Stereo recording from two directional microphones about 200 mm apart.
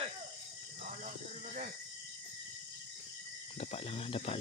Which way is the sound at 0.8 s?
40° right (ahead or behind).